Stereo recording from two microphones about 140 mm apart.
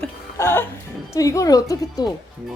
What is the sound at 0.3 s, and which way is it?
Music, 15° left (ahead or behind).